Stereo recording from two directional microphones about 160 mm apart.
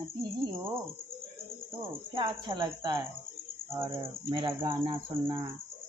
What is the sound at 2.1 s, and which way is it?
Cricket, 30° right (ahead or behind).